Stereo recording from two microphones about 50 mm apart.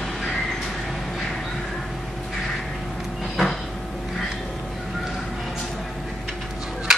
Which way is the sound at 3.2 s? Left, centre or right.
Centre.